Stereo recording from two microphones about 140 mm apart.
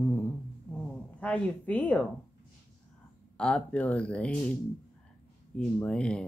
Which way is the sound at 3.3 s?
10° left (ahead or behind).